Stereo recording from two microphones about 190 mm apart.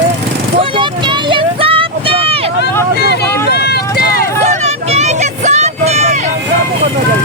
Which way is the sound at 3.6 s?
60° left (ahead or behind).